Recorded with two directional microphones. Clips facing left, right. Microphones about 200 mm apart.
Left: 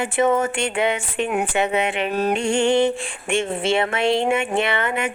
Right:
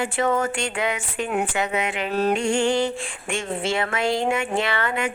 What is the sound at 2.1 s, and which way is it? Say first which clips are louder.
Music: right 1 dB; 15° left (ahead or behind).